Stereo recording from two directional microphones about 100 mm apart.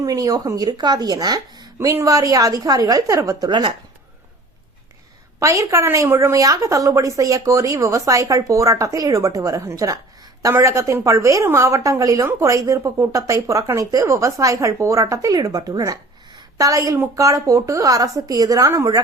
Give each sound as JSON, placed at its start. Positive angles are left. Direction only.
{"t": 0.0, "sound": "a woman's voice", "side_deg": -35}
{"t": 5.4, "sound": "a woman's voice", "side_deg": -30}